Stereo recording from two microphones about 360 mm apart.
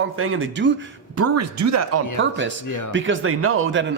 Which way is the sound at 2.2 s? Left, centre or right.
Right.